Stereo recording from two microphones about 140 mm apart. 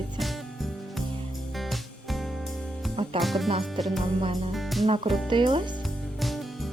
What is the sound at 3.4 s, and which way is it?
Speech, 45° right (ahead or behind).